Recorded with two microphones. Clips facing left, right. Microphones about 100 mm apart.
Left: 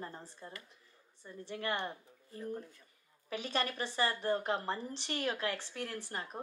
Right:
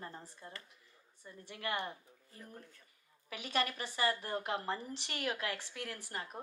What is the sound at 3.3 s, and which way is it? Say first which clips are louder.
A woman's voice: left 1 dB; 35° left (ahead or behind).